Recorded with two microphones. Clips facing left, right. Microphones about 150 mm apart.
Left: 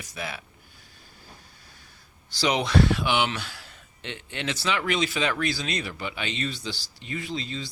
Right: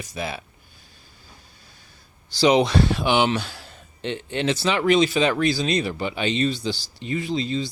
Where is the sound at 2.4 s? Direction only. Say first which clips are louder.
Right 5 dB; 30° right (ahead or behind).